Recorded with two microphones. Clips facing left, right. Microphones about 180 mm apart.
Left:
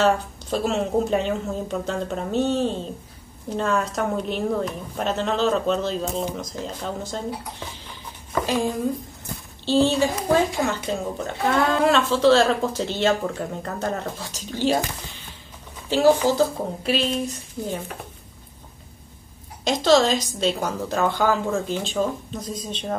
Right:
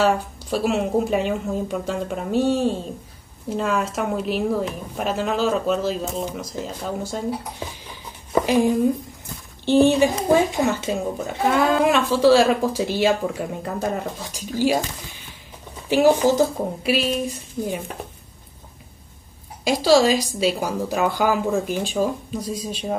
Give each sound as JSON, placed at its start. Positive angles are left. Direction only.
{"t": 0.0, "sound": "a woman's voice", "side_deg": -10}
{"t": 8.5, "sound": "a woman's voice", "side_deg": -15}
{"t": 11.1, "sound": "speech", "side_deg": 0}
{"t": 11.8, "sound": "a woman's voice", "side_deg": -15}
{"t": 15.9, "sound": "a woman's voice", "side_deg": -15}
{"t": 19.6, "sound": "a woman's voice", "side_deg": -10}